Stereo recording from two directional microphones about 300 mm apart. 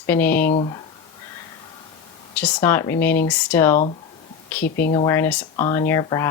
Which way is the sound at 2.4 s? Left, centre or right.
Centre.